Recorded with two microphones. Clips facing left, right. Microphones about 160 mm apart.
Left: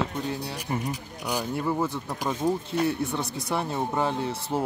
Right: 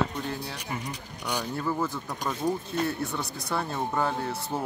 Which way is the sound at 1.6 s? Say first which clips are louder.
Left 1 dB; 20° left (ahead or behind).